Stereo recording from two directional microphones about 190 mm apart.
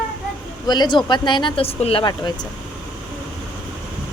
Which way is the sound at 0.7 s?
25° left (ahead or behind).